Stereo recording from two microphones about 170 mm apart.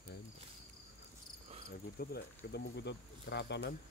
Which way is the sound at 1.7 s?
70° left (ahead or behind).